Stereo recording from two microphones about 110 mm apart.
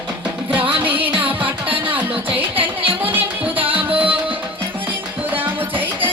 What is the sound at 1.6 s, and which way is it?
Music, 50° right (ahead or behind).